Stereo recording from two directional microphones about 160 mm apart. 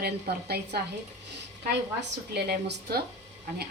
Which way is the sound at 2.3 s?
90° right.